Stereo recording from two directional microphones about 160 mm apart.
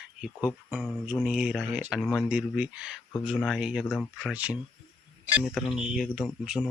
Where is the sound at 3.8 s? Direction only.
10° left (ahead or behind).